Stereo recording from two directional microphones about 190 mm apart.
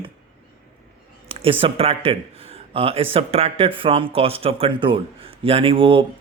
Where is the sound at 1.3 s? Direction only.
30° right (ahead or behind).